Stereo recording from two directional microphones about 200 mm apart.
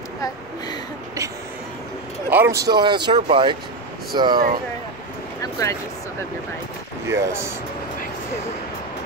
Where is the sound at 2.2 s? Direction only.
10° right (ahead or behind).